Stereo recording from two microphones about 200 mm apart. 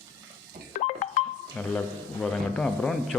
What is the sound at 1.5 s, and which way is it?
A man's voice, 5° left (ahead or behind).